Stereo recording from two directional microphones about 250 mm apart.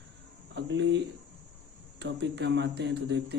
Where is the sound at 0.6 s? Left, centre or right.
Right.